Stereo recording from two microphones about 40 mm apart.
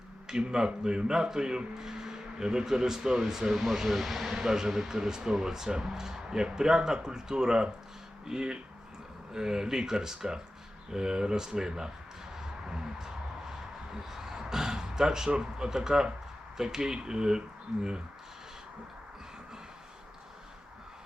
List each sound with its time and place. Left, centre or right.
0.3 s speech: centre
3.5 s speech: centre
12.4 s a sound: centre
15.3 s speech: centre